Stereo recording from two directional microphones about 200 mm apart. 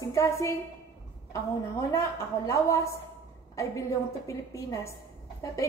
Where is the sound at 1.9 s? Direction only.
15° left (ahead or behind).